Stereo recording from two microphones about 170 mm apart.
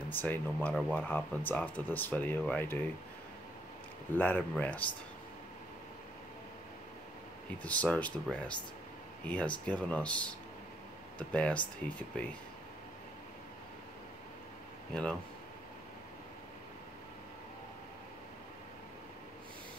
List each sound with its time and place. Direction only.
0.1 s speech: 10° left (ahead or behind)
4.2 s speech: 10° left (ahead or behind)
7.6 s speech: 10° left (ahead or behind)